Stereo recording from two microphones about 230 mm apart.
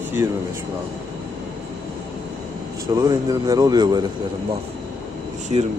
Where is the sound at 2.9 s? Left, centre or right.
Centre.